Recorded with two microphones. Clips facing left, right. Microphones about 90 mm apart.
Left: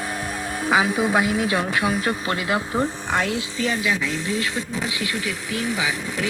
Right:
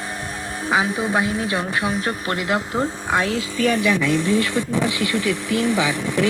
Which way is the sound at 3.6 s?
55° right (ahead or behind).